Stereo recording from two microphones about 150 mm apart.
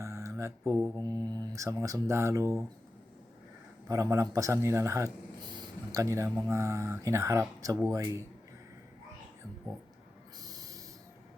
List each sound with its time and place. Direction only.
0.0 s a man's voice: 20° right (ahead or behind)
3.8 s a man's voice: 20° right (ahead or behind)
10.4 s a sound: 25° right (ahead or behind)